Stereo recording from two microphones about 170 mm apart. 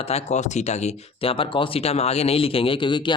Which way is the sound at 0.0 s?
40° left (ahead or behind).